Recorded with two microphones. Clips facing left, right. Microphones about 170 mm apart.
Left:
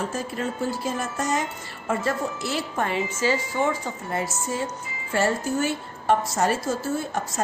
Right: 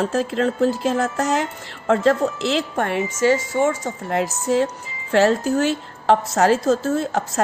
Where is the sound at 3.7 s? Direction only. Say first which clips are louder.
Right 5 dB; 80° right.